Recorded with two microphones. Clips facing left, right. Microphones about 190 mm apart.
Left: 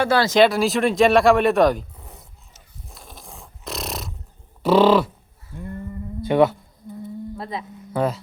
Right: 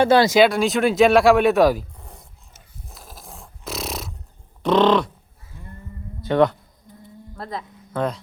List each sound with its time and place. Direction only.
0.0 s speech: 20° right (ahead or behind)
0.3 s speech: centre (ahead or behind)
2.9 s a sound: 5° right (ahead or behind)
4.6 s bird: 5° left (ahead or behind)
6.2 s speech: 10° left (ahead or behind)